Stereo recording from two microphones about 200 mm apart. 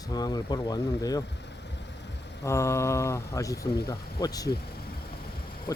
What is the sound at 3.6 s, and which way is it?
Speech, 50° left (ahead or behind).